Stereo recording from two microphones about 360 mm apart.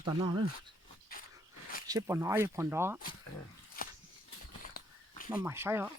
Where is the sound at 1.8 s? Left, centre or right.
Centre.